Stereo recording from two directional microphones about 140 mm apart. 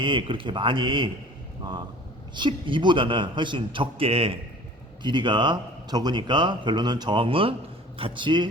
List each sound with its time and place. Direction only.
0.0 s speech: 35° right (ahead or behind)
2.3 s speech: 35° right (ahead or behind)